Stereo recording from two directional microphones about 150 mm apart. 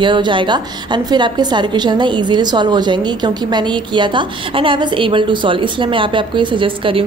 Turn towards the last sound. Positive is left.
turn(degrees=-35)  # may be behind; listen again after turning